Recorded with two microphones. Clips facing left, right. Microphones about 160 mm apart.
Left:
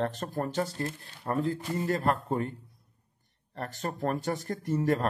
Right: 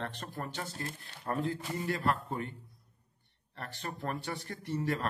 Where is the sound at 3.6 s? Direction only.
45° left (ahead or behind).